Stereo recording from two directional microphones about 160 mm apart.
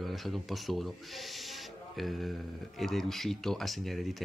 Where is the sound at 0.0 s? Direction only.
Centre (ahead or behind).